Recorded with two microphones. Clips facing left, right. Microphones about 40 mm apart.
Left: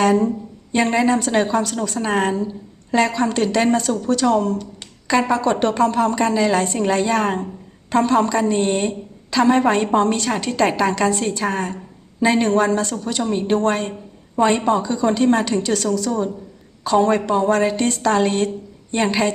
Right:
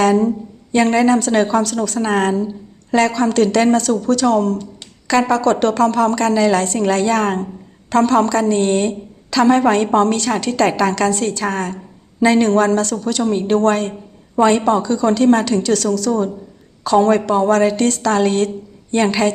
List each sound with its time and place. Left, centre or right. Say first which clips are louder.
0.0 s a woman's voice: right 2 dB; centre